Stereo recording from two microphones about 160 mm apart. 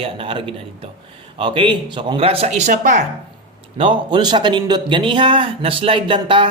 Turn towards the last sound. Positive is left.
turn(degrees=-30)  # may be behind; listen again after turning